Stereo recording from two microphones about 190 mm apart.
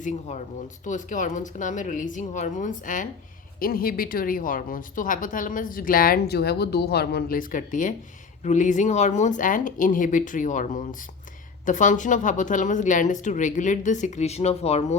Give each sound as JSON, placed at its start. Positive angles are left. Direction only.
{"t": 0.0, "sound": "a woman's voice", "side_deg": 40}